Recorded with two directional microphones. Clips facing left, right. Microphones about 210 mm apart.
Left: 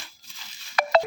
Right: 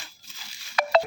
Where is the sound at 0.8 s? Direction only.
50° left (ahead or behind).